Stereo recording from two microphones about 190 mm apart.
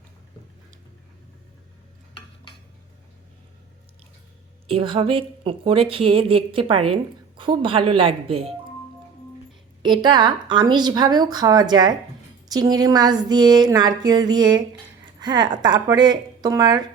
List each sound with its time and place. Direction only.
4.7 s a woman's voice: 30° right (ahead or behind)
9.8 s a woman's voice: 25° right (ahead or behind)